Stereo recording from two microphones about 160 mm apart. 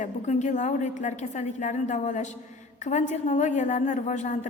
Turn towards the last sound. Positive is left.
turn(degrees=50)  # may be behind; listen again after turning